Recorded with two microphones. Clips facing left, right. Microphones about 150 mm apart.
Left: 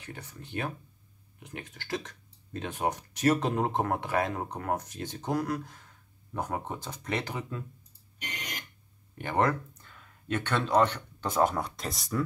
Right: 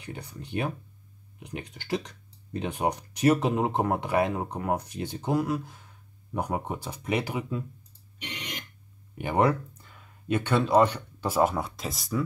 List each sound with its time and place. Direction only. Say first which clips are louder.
0.0 s speech: right 4 dB; 15° right (ahead or behind)
8.2 s a sound: right 2 dB; 45° left (ahead or behind)
9.2 s speech: right 3 dB; 10° right (ahead or behind)